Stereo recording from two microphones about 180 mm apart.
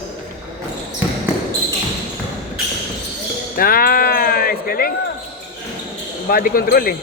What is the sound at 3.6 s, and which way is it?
Sheep, 55° left (ahead or behind).